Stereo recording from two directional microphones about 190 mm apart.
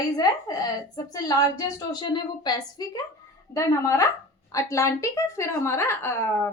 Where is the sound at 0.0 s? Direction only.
20° left (ahead or behind).